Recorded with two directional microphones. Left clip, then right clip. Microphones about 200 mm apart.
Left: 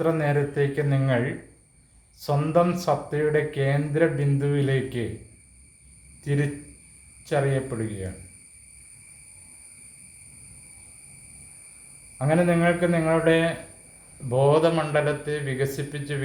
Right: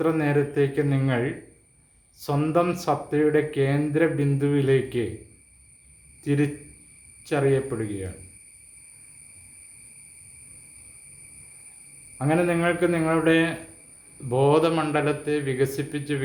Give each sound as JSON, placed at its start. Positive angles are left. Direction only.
{"t": 0.0, "sound": "speech", "side_deg": -15}
{"t": 6.2, "sound": "speech", "side_deg": -15}
{"t": 12.1, "sound": "a man's voice", "side_deg": -15}